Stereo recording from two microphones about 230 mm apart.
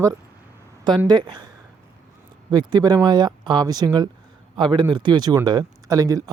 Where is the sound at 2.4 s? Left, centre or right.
Centre.